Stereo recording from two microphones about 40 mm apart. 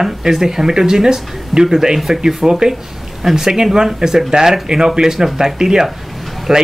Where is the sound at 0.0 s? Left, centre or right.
Centre.